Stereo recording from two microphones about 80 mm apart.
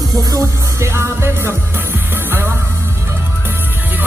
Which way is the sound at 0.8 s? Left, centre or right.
Right.